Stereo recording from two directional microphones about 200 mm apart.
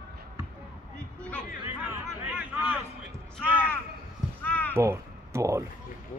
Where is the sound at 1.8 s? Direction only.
10° right (ahead or behind).